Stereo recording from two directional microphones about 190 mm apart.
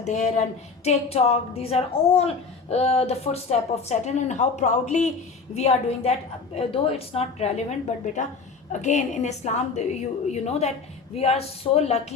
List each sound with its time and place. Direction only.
0.0 s a woman's voice: 35° left (ahead or behind)